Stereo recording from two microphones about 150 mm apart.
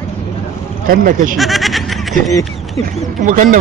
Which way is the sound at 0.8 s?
70° right (ahead or behind).